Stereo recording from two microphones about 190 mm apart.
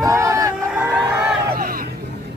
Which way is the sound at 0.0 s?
15° right (ahead or behind).